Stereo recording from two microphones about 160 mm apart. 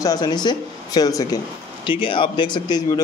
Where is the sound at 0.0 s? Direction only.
25° left (ahead or behind).